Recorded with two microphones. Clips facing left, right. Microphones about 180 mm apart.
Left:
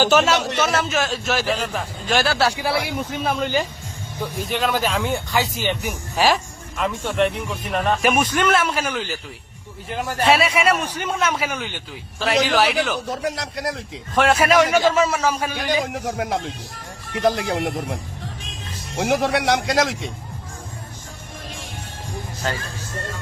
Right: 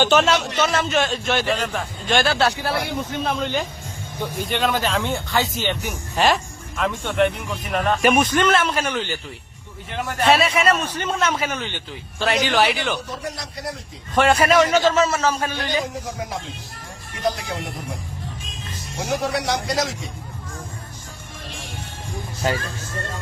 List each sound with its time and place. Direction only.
0.0 s speech: 5° left (ahead or behind)
10.2 s a man's voice: 5° left (ahead or behind)
13.2 s speech: 90° left
14.2 s a man's voice: centre (ahead or behind)
15.8 s speech: 65° left (ahead or behind)
17.4 s speech: 80° left
18.9 s speech: 65° left (ahead or behind)
22.4 s speech: 10° right (ahead or behind)